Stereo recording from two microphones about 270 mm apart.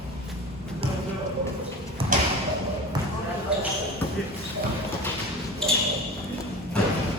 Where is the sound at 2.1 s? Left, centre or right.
Right.